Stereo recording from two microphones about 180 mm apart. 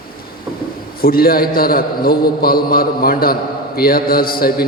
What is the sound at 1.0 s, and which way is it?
A man's voice, 55° left (ahead or behind).